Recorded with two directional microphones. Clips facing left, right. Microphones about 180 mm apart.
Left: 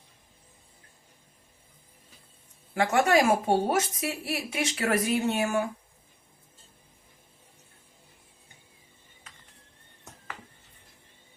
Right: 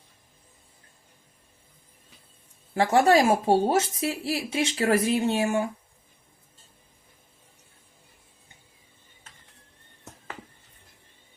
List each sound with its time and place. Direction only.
2.7 s speech: 30° right (ahead or behind)